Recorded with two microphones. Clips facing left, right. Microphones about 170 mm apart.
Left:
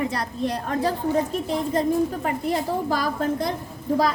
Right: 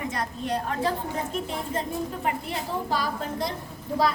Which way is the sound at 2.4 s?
45° left (ahead or behind).